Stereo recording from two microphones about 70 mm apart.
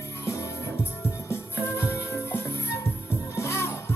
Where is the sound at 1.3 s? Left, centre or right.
Left.